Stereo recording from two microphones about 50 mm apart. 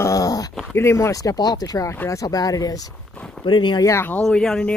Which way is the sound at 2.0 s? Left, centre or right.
Left.